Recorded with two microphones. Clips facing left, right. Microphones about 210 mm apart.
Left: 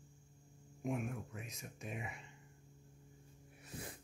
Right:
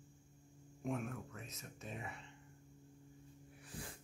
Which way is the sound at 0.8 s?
10° left (ahead or behind).